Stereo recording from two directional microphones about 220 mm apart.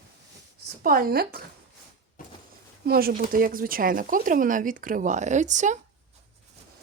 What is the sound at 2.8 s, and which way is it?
Speech, 45° right (ahead or behind).